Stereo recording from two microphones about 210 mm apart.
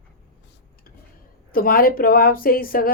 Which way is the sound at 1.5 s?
45° left (ahead or behind).